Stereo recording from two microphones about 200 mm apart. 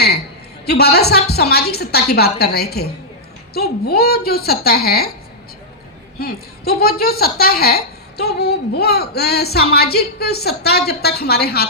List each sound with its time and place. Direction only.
0.6 s a woman's voice: 55° left (ahead or behind)
6.1 s a woman's voice: 50° left (ahead or behind)